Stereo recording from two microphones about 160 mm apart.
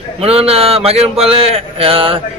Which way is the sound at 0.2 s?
40° right (ahead or behind).